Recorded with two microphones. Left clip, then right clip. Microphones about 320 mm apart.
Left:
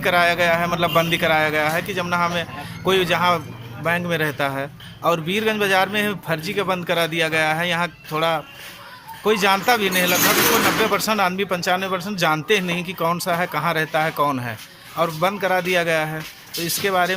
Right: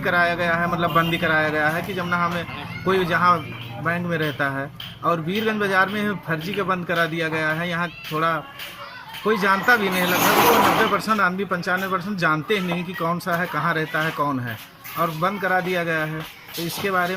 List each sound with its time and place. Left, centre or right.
0.0 s a man's voice: centre
10.9 s a man's voice: centre